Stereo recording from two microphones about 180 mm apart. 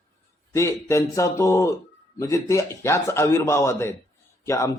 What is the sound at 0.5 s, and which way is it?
A man's voice, 15° left (ahead or behind).